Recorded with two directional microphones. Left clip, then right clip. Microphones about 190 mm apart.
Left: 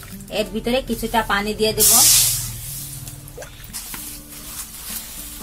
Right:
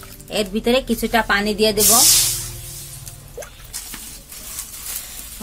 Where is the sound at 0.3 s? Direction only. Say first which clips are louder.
Right 3 dB; 40° right (ahead or behind).